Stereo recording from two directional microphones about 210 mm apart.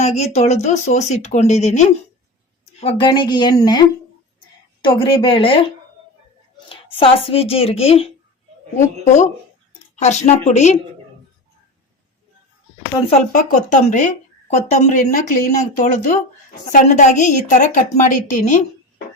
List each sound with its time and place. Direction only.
0.0 s a woman's voice: 30° left (ahead or behind)
2.8 s a woman's voice: 20° left (ahead or behind)
6.9 s a woman's voice: 25° left (ahead or behind)
9.9 s a woman's voice: 35° left (ahead or behind)
13.3 s a woman's voice: 35° left (ahead or behind)